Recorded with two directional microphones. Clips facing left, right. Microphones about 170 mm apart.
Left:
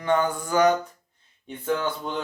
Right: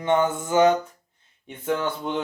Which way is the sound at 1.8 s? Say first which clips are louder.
Right 2 dB; 20° right (ahead or behind).